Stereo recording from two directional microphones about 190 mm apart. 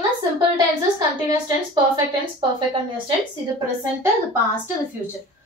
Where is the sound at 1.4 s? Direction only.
20° right (ahead or behind).